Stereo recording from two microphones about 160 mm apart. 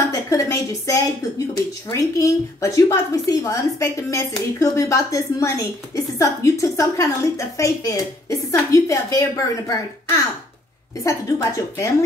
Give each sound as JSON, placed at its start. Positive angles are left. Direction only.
{"t": 0.1, "sound": "a woman's voice", "side_deg": 20}